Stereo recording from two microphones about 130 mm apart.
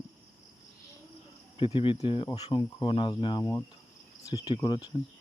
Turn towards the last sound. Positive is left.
turn(degrees=30)  # may be behind; listen again after turning